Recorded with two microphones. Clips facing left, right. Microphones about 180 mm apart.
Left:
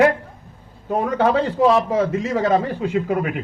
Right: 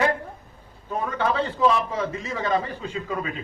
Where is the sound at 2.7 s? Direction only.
65° left (ahead or behind).